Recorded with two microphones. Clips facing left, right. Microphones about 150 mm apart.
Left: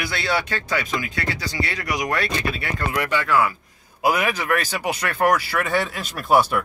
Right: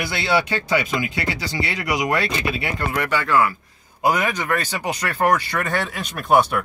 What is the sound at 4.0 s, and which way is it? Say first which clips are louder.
Speech: right 1 dB; 10° left (ahead or behind).